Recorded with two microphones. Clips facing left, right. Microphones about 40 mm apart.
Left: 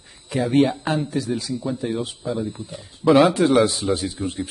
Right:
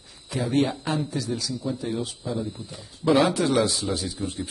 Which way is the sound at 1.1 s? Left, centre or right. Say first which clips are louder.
Left 4 dB; left.